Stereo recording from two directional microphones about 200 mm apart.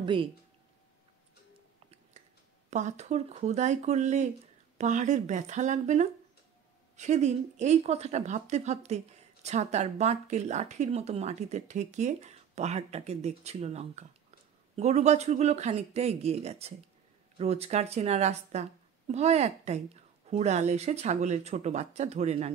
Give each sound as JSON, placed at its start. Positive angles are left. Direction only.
{"t": 0.0, "sound": "speech", "side_deg": -25}
{"t": 2.7, "sound": "speech", "side_deg": -35}